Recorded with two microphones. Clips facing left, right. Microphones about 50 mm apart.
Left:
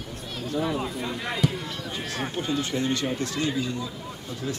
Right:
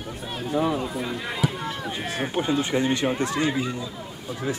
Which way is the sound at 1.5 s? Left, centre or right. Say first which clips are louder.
Right 3 dB; right.